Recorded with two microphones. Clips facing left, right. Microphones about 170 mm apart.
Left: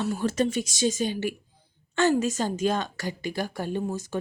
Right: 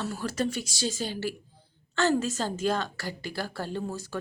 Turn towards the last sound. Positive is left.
turn(degrees=20)  # may be behind; listen again after turning